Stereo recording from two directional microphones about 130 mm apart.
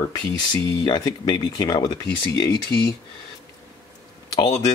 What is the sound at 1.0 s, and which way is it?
Speech, 30° left (ahead or behind).